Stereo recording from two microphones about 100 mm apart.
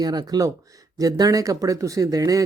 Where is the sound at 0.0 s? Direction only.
40° right (ahead or behind).